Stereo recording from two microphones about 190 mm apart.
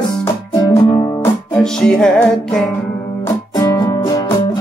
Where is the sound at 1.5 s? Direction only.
5° left (ahead or behind).